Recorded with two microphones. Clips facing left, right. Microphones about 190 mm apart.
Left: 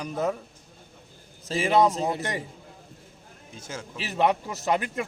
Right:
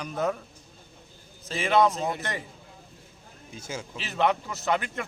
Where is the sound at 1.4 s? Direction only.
35° left (ahead or behind).